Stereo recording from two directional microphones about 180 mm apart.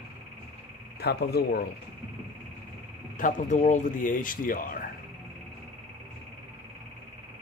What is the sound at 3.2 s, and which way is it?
Speech, 45° left (ahead or behind).